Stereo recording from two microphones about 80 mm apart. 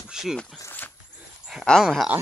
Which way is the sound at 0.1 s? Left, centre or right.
Centre.